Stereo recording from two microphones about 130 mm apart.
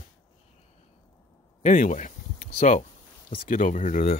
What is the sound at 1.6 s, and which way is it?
Speech, 65° left (ahead or behind).